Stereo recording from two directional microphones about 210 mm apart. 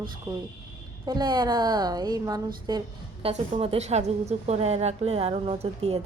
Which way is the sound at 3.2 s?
30° right (ahead or behind).